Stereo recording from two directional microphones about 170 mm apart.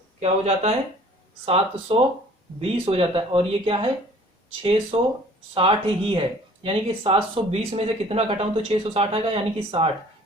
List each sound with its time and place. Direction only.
0.2 s speech: 40° right (ahead or behind)